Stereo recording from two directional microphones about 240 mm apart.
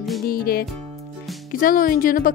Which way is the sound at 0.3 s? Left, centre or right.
Left.